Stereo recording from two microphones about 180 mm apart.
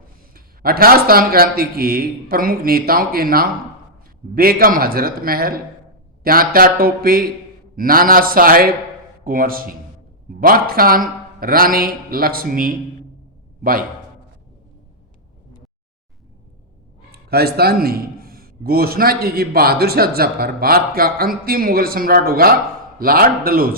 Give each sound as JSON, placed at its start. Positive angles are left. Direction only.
{"t": 0.3, "sound": "a man's voice", "side_deg": -55}
{"t": 17.1, "sound": "a man's voice", "side_deg": -60}